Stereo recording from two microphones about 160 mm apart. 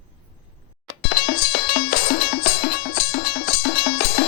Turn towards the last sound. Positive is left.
turn(degrees=90)